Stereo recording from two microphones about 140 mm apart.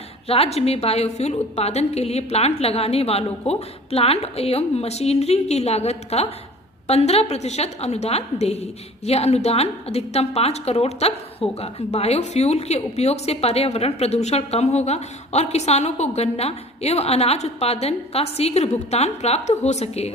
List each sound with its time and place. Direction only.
0.3 s a woman's voice: 45° left (ahead or behind)